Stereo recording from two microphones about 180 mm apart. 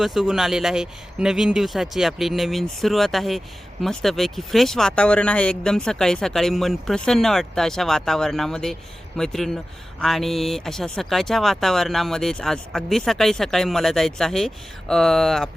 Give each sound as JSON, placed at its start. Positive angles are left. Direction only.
{"t": 0.0, "sound": "speech", "side_deg": 0}